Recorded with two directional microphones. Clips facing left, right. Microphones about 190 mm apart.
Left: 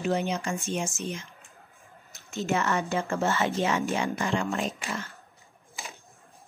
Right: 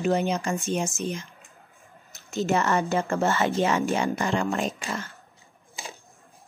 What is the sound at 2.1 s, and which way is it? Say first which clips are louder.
A woman's voice: right 4 dB; 40° right (ahead or behind).